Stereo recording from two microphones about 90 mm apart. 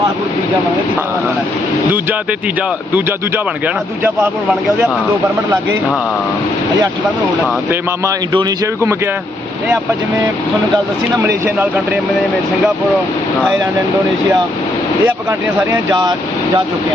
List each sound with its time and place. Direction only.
2.6 s speech: 20° right (ahead or behind)
8.3 s speech: 60° right (ahead or behind)
8.6 s speech: 30° right (ahead or behind)
11.2 s speech: 25° right (ahead or behind)
15.0 s speech: 30° right (ahead or behind)